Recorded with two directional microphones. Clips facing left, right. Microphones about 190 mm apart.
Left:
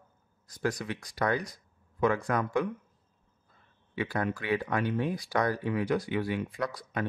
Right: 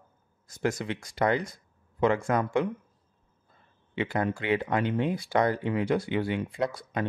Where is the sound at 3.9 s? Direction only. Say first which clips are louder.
Right 3 dB; 25° right (ahead or behind).